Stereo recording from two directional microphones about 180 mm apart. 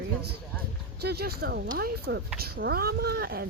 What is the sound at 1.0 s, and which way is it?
Speech, 60° right (ahead or behind).